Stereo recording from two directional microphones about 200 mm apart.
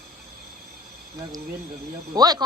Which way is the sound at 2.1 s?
20° right (ahead or behind).